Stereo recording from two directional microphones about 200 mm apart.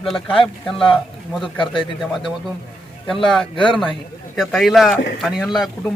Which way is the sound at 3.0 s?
Centre (ahead or behind).